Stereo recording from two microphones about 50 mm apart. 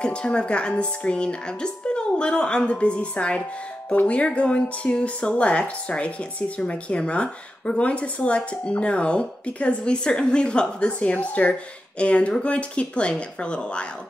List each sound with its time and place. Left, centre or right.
0.0 s speech: centre